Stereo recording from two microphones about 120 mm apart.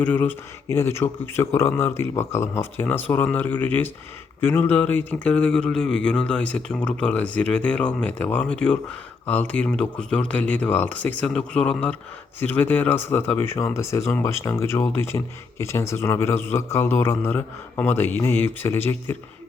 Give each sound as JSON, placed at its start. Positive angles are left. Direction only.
{"t": 0.0, "sound": "a man's voice", "side_deg": 15}